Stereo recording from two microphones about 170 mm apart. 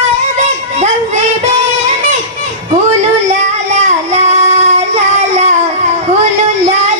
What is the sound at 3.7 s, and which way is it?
Child singing, 40° right (ahead or behind).